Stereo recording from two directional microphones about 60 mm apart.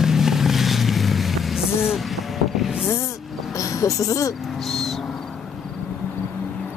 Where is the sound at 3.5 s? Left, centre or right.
Left.